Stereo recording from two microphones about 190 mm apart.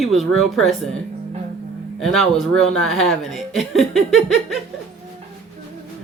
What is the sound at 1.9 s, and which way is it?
Speech, centre (ahead or behind).